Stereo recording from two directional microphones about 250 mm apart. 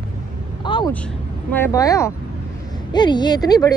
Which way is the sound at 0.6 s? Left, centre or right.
Centre.